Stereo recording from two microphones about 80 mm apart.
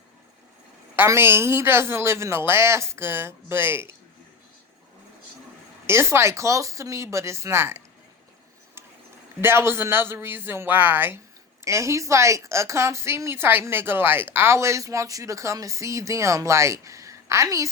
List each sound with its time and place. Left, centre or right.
0.9 s a woman's voice: right
5.8 s a woman's voice: right
9.4 s a man's voice: right
11.6 s a woman's voice: right